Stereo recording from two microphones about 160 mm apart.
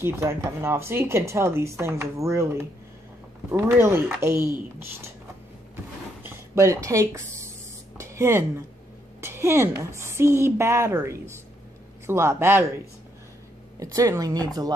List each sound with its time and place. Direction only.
0.0 s speech: 15° right (ahead or behind)
3.5 s speech: 15° right (ahead or behind)
6.2 s a sound: 20° right (ahead or behind)
8.0 s a woman's voice: 15° right (ahead or behind)
13.7 s speech: 20° right (ahead or behind)